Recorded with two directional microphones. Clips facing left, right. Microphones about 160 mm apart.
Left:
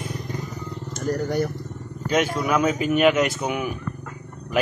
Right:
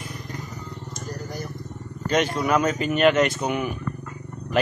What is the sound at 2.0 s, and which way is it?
Speech, 5° left (ahead or behind).